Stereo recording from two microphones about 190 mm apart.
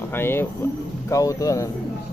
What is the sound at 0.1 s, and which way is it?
Speech, 10° left (ahead or behind).